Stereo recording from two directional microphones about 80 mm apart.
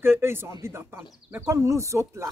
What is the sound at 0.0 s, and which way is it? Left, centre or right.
Speech, right.